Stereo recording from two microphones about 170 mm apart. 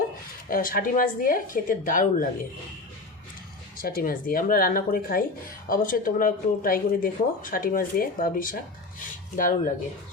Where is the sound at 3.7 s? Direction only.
55° left (ahead or behind).